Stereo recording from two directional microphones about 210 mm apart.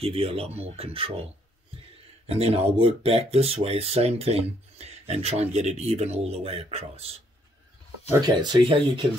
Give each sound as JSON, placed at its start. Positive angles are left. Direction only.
{"t": 0.0, "sound": "speech", "side_deg": -30}
{"t": 2.2, "sound": "speech", "side_deg": -30}
{"t": 8.1, "sound": "speech", "side_deg": -20}